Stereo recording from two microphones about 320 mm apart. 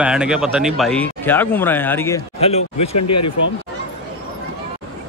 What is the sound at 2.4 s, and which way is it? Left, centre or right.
Speech, centre.